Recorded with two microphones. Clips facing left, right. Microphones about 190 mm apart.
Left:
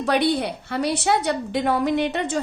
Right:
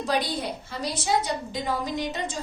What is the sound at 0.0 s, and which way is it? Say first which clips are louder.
A woman's voice: left 6 dB; 65° left (ahead or behind).